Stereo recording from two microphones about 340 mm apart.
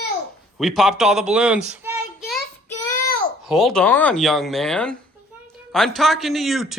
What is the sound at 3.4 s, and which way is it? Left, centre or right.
A man's voice, centre.